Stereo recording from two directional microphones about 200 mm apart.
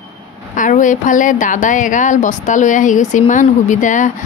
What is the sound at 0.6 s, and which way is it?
A woman's voice, 40° left (ahead or behind).